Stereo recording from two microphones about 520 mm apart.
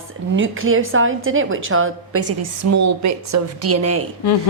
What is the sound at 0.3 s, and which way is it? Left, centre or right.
A woman's voice, right.